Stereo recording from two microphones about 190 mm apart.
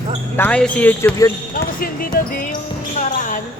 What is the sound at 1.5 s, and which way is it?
Basketball bounce, 50° left (ahead or behind).